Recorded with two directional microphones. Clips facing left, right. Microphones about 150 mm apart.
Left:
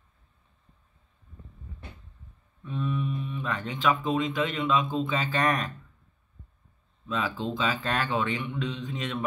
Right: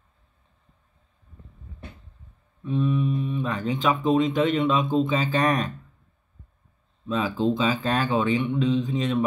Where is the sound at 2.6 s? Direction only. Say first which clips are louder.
Right 7 dB; 20° right (ahead or behind).